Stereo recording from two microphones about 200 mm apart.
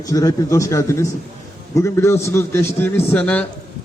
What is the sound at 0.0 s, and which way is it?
A man's voice, 15° left (ahead or behind).